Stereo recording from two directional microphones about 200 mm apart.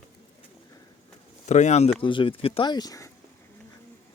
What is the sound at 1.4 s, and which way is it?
Speech, 35° left (ahead or behind).